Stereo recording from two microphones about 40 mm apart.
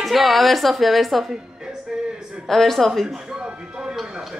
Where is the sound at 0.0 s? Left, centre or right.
Centre.